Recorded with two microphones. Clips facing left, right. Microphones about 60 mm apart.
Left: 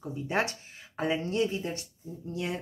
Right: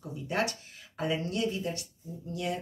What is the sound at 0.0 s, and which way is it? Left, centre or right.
Speech, left.